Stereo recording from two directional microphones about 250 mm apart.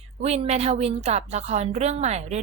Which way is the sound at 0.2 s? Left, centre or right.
Right.